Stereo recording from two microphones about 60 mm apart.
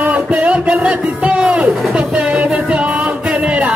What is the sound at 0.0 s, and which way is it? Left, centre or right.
Music, right.